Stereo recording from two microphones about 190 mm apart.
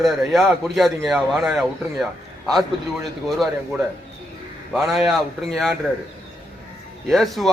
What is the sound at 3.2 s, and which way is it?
Speech, centre (ahead or behind).